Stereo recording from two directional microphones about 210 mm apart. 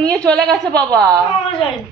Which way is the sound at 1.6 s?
25° left (ahead or behind).